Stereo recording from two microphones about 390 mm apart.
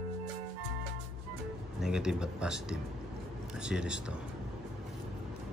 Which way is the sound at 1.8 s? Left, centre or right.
Centre.